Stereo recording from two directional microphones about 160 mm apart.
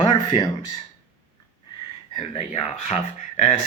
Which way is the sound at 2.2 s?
40° left (ahead or behind).